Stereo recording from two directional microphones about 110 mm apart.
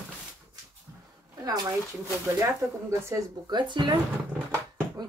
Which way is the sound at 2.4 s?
30° right (ahead or behind).